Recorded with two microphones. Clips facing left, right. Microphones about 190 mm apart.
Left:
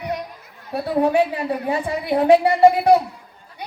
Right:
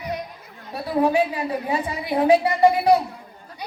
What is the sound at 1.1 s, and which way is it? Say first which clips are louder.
A woman's voice: left 2 dB; 60° left (ahead or behind).